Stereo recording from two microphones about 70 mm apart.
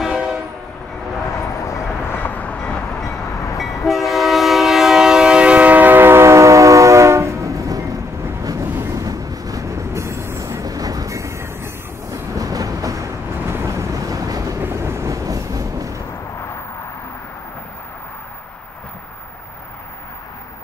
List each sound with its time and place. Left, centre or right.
0.0 s train: centre
1.3 s vehicle: left
2.0 s train: left; by 3.3 s centre
3.3 s train: left
3.8 s train: centre; by 8.0 s right
8.7 s train: right
9.0 s train: right
10.6 s train: right
13.7 s vehicle: right
14.6 s vehicle: right
16.3 s vehicle: left